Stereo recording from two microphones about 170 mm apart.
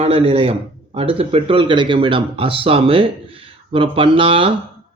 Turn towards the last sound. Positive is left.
turn(degrees=-30)  # may be behind; listen again after turning